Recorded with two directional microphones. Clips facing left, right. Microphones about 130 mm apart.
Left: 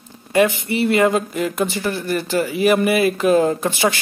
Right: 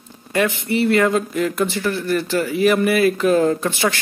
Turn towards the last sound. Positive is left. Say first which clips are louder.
# even
turn(degrees=15)  # may be behind; listen again after turning